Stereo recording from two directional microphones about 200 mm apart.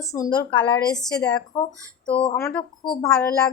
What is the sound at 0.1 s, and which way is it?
A woman's voice, 20° left (ahead or behind).